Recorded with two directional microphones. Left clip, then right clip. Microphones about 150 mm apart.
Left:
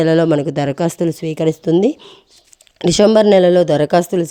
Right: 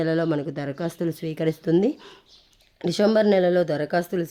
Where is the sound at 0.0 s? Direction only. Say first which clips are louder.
Left 10 dB; 45° left (ahead or behind).